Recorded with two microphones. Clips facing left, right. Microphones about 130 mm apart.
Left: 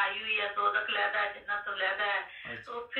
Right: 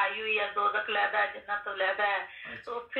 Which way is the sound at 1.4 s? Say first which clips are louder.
Right 4 dB; 45° right (ahead or behind).